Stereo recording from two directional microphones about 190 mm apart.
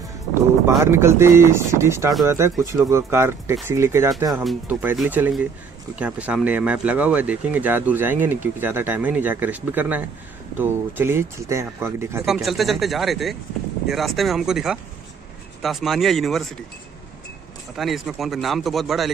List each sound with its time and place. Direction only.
0.3 s speech: 15° right (ahead or behind)
4.5 s speech: 5° right (ahead or behind)
12.4 s a man's voice: centre (ahead or behind)
17.7 s a man's voice: centre (ahead or behind)